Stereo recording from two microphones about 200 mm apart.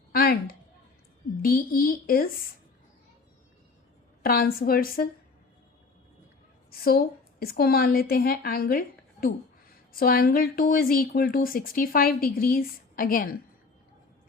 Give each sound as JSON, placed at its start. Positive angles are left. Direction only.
{"t": 0.1, "sound": "a sound", "side_deg": 50}
{"t": 1.4, "sound": "speech", "side_deg": 45}
{"t": 4.2, "sound": "speech", "side_deg": 45}
{"t": 6.7, "sound": "speech", "side_deg": 50}
{"t": 9.9, "sound": "speech", "side_deg": 45}